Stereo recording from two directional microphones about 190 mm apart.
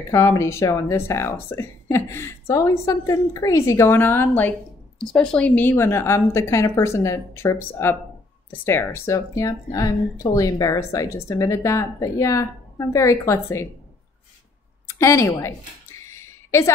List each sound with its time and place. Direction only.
0.1 s speech: 15° left (ahead or behind)
14.9 s speech: 15° left (ahead or behind)
16.1 s a sound: 15° left (ahead or behind)